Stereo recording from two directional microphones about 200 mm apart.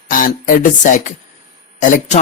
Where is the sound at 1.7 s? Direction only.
40° left (ahead or behind).